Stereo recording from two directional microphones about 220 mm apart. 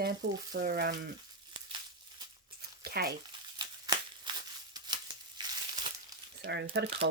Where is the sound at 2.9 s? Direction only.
45° right (ahead or behind).